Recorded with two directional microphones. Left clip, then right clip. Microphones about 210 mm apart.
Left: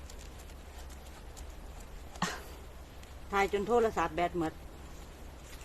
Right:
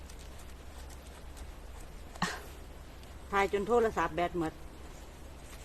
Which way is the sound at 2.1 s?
Centre (ahead or behind).